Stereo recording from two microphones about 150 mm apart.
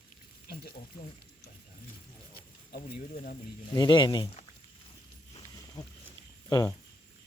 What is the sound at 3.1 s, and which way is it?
Speech, 65° left (ahead or behind).